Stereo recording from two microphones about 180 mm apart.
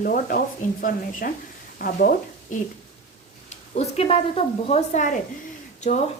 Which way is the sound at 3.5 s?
35° left (ahead or behind).